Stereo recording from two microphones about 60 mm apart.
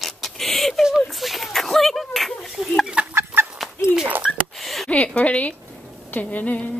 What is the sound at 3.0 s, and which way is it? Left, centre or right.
Chicken, right.